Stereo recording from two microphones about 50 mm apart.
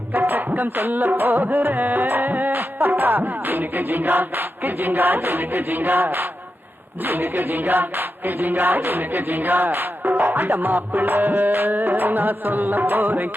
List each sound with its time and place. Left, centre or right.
0.1 s music: right
1.5 s carnatic music: right
1.9 s music: right
2.5 s music: right